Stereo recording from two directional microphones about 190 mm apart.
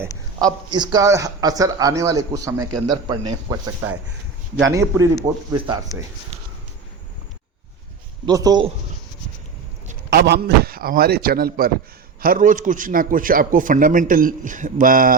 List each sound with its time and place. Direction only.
0.7 s speech: 20° right (ahead or behind)
4.6 s speech: 15° right (ahead or behind)
8.3 s speech: 20° right (ahead or behind)
10.1 s a man's voice: 60° right (ahead or behind)